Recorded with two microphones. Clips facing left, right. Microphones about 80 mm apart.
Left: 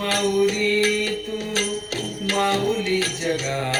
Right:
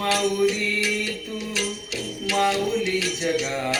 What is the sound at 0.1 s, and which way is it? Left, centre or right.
Music, left.